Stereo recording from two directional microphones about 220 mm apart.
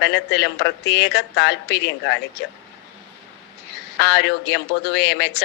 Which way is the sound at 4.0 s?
50° left (ahead or behind).